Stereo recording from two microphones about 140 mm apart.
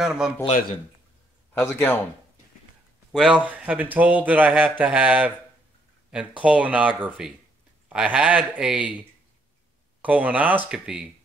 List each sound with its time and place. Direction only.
0.0 s speech: 5° right (ahead or behind)
1.6 s a man's voice: 15° left (ahead or behind)
3.1 s speech: 5° right (ahead or behind)
10.0 s speech: 10° right (ahead or behind)